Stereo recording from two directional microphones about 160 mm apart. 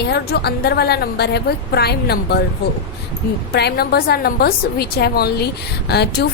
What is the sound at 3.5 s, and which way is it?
A woman's voice, 90° left.